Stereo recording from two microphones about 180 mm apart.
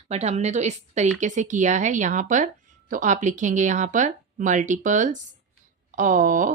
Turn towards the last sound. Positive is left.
turn(degrees=-45)  # may be behind; listen again after turning